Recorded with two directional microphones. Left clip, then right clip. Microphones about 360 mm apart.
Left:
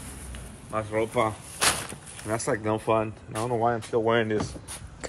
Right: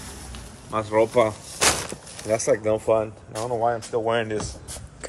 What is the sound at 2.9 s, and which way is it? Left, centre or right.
Speech, centre.